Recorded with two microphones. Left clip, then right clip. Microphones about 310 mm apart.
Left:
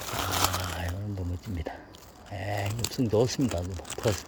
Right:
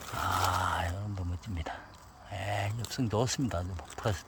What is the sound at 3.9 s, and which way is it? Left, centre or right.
Crumpling, left.